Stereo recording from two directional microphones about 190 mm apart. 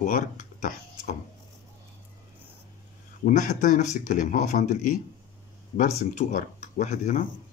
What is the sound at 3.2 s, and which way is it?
Speech, 40° left (ahead or behind).